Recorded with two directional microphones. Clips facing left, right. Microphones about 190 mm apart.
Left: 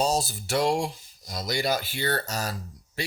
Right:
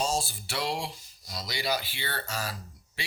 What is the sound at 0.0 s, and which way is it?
Speech, 40° left (ahead or behind).